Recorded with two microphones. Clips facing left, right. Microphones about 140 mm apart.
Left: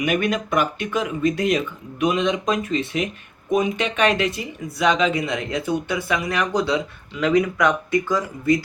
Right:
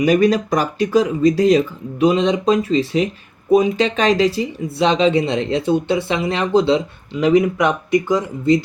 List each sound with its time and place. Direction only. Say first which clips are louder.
0.0 s speech: right 7 dB; 35° right (ahead or behind)